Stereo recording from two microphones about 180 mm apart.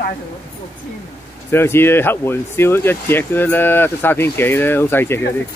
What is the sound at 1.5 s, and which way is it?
Speech, 15° left (ahead or behind).